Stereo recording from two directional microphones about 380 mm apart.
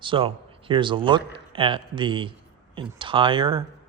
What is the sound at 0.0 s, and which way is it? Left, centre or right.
Speech, centre.